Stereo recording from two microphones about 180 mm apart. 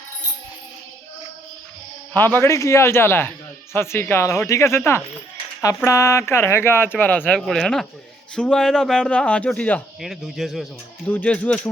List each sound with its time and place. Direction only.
2.1 s speech: 10° left (ahead or behind)